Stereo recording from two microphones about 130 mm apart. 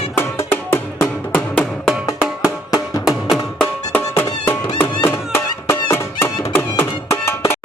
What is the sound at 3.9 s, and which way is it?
Music, 15° left (ahead or behind).